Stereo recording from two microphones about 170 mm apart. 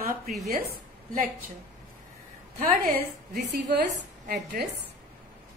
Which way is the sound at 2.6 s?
40° right (ahead or behind).